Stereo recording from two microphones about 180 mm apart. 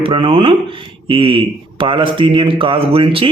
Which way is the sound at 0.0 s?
30° right (ahead or behind).